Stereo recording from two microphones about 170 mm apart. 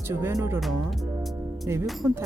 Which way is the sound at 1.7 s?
15° right (ahead or behind).